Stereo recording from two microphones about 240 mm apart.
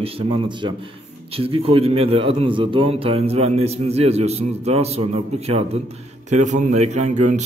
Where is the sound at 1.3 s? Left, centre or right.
Right.